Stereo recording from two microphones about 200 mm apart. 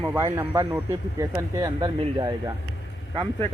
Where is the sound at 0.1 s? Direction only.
15° right (ahead or behind).